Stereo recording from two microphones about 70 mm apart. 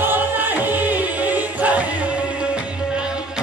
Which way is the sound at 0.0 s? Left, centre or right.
Right.